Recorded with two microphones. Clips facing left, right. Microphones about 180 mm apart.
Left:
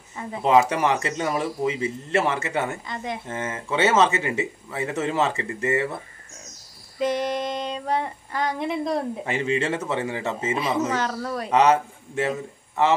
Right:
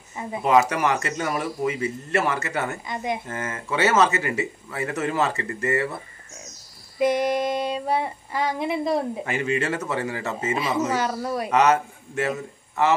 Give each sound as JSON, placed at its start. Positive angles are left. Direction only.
{"t": 0.1, "sound": "speech", "side_deg": -15}
{"t": 0.5, "sound": "a man's voice", "side_deg": 25}
{"t": 2.9, "sound": "a man's voice", "side_deg": -15}
{"t": 3.3, "sound": "a man's voice", "side_deg": 25}
{"t": 7.0, "sound": "female singing", "side_deg": -10}
{"t": 9.2, "sound": "a man's voice", "side_deg": 25}
{"t": 10.5, "sound": "a man's voice", "side_deg": -5}
{"t": 11.5, "sound": "a man's voice", "side_deg": 30}